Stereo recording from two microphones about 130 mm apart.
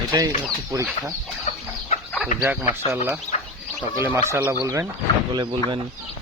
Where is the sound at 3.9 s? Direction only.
20° right (ahead or behind).